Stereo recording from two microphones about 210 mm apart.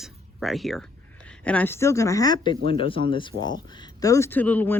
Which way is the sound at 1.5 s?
10° left (ahead or behind).